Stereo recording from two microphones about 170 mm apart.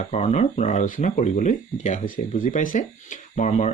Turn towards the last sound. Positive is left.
turn(degrees=45)  # may be behind; listen again after turning